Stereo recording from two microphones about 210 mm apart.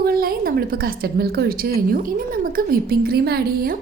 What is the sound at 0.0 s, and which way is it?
A woman's voice, 45° right (ahead or behind).